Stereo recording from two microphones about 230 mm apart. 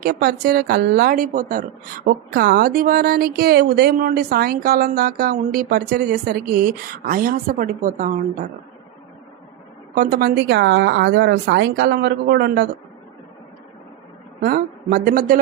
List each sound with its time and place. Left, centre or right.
0.0 s speech: right
9.9 s speech: right
14.4 s speech: right